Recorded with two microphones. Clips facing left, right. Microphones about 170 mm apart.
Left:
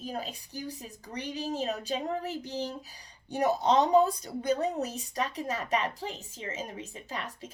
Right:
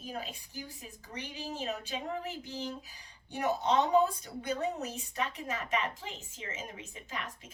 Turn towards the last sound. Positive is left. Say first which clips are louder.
# left 3 dB
turn(degrees=35)  # may be behind; listen again after turning